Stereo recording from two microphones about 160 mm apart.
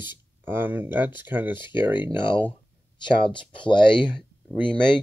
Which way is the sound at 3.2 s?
30° left (ahead or behind).